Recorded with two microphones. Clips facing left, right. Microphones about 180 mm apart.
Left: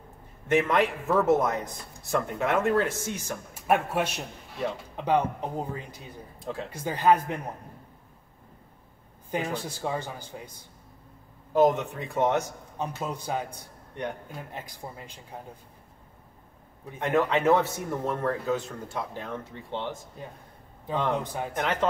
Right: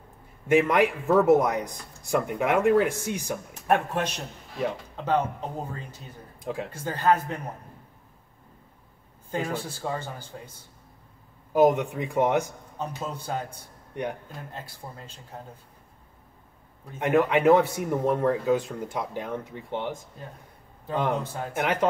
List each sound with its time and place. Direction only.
0.5 s speech: 10° right (ahead or behind)
3.5 s speech: 10° left (ahead or behind)
6.4 s speech: 10° right (ahead or behind)
6.7 s speech: 15° left (ahead or behind)
9.3 s speech: 15° left (ahead or behind)
11.5 s speech: 10° right (ahead or behind)
12.7 s speech: 15° left (ahead or behind)
14.5 s speech: 15° left (ahead or behind)
17.0 s speech: 10° right (ahead or behind)
21.2 s speech: 15° left (ahead or behind)
21.5 s speech: 10° right (ahead or behind)